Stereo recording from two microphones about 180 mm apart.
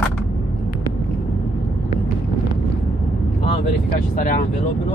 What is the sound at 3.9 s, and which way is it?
Speech, 50° left (ahead or behind).